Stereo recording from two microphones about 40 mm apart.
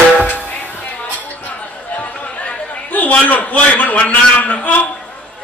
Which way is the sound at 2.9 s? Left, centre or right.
Left.